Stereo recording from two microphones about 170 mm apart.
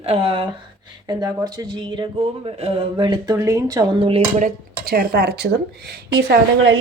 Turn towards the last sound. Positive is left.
turn(degrees=-85)